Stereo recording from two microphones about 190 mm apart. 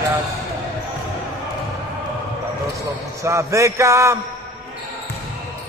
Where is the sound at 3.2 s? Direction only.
15° right (ahead or behind).